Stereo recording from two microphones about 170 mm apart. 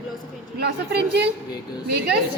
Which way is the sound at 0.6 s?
75° right (ahead or behind).